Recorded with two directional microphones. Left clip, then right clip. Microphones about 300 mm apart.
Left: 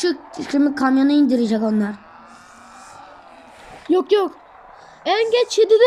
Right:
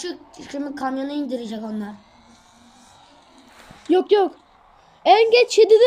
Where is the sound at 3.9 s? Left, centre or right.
Centre.